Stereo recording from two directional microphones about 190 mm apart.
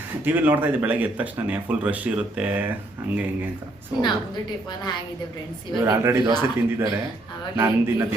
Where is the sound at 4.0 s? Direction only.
25° left (ahead or behind).